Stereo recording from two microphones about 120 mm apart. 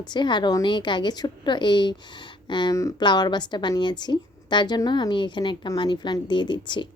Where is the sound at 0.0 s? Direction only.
40° left (ahead or behind).